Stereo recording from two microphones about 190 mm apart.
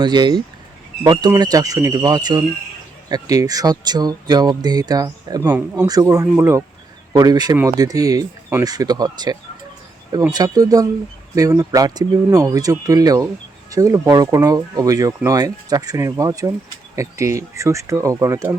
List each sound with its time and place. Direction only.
0.0 s speech: 20° right (ahead or behind)